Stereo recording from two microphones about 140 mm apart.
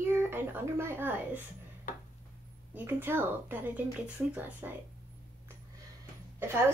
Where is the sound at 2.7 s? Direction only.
15° right (ahead or behind).